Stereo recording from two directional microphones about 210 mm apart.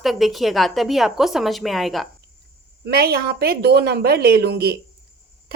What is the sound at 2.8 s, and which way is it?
A woman's voice, 45° right (ahead or behind).